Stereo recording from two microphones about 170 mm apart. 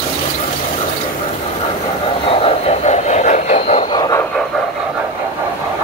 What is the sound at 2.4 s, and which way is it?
Train, 40° left (ahead or behind).